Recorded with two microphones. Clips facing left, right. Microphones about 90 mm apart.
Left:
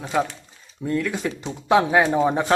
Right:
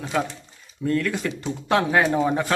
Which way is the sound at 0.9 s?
15° left (ahead or behind).